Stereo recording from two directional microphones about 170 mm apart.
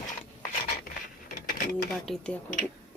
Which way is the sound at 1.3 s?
60° left (ahead or behind).